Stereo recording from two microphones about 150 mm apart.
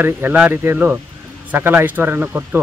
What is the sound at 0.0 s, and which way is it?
Speech, 15° right (ahead or behind).